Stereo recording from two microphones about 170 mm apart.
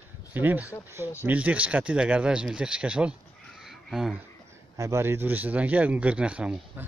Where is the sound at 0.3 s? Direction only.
10° right (ahead or behind).